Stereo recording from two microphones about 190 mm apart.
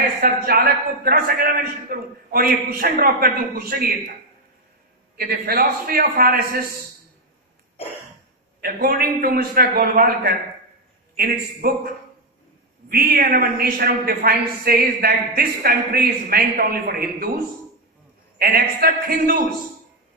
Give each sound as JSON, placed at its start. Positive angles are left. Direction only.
{"t": 0.2, "sound": "a man's voice", "side_deg": -50}
{"t": 5.1, "sound": "a man's voice", "side_deg": -50}
{"t": 7.8, "sound": "cough", "side_deg": 30}
{"t": 8.5, "sound": "a man's voice", "side_deg": -50}
{"t": 18.4, "sound": "a man's voice", "side_deg": -50}